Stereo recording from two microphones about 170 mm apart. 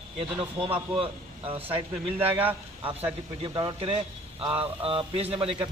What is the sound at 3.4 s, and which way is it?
A man's voice, 30° right (ahead or behind).